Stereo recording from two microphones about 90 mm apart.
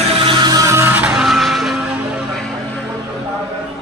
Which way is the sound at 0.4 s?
45° right (ahead or behind).